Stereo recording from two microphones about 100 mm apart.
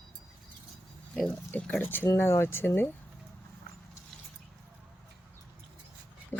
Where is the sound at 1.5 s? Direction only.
15° left (ahead or behind).